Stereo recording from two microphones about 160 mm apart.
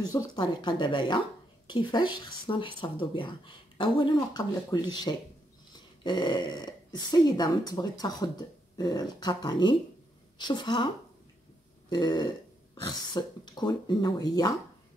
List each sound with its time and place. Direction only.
0.0 s speech: 25° left (ahead or behind)
11.9 s speech: 25° left (ahead or behind)